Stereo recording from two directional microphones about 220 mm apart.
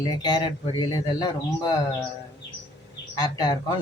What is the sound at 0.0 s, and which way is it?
Speech, 20° left (ahead or behind).